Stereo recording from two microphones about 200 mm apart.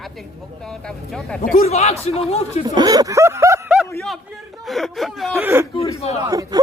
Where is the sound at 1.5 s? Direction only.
30° left (ahead or behind).